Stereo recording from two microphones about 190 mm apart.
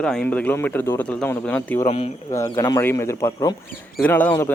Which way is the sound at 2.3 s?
15° left (ahead or behind).